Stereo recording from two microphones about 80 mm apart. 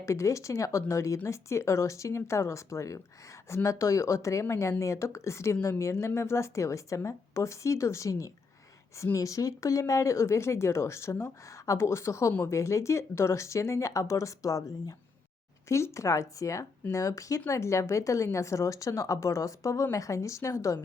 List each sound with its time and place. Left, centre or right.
0.0 s speech: left